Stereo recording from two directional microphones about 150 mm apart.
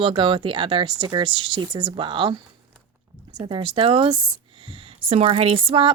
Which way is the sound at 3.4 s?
35° right (ahead or behind).